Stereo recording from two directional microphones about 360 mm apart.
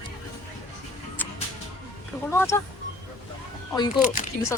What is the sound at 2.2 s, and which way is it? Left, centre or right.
Speech, centre.